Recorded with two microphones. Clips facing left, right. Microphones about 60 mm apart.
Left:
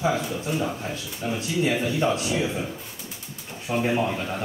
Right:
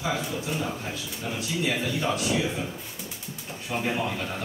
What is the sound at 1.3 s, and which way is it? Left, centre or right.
Speech, left.